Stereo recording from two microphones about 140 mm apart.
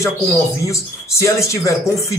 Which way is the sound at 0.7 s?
20° left (ahead or behind).